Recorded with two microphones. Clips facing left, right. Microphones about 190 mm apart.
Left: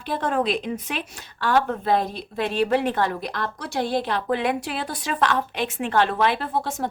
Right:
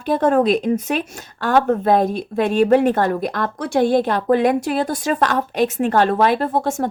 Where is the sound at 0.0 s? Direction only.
45° right (ahead or behind).